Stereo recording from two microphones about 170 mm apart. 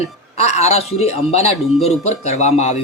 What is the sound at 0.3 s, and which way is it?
Speech, 40° left (ahead or behind).